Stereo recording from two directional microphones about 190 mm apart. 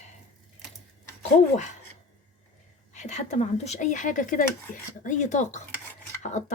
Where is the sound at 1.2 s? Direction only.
40° left (ahead or behind).